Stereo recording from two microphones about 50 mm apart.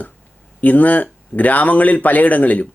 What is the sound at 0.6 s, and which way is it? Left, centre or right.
Speech, left.